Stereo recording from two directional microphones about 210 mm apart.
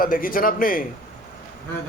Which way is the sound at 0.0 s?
40° left (ahead or behind).